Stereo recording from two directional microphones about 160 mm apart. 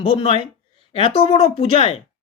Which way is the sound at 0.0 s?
30° left (ahead or behind).